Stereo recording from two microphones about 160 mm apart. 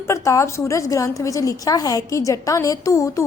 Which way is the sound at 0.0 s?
20° left (ahead or behind).